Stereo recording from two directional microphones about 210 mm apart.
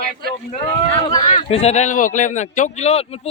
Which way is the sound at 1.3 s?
30° left (ahead or behind).